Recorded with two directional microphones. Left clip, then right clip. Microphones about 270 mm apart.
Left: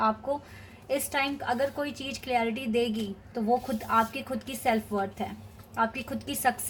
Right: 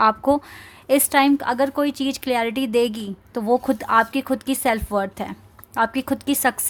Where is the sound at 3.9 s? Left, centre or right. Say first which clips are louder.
Right 8 dB; right.